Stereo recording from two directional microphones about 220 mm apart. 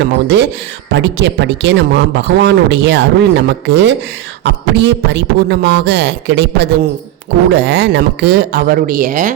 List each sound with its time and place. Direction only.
0.0 s speech: 50° right (ahead or behind)